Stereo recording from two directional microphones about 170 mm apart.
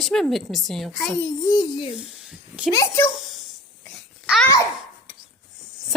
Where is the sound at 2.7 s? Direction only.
20° left (ahead or behind).